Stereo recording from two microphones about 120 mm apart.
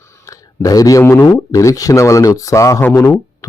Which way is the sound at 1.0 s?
20° left (ahead or behind).